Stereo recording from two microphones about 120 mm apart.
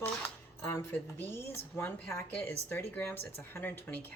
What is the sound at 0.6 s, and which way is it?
Speech, 20° left (ahead or behind).